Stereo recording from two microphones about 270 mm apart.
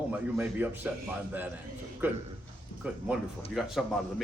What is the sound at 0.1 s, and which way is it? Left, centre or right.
Speech, centre.